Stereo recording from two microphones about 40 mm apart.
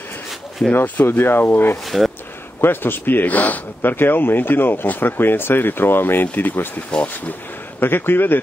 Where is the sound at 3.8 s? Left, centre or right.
Left.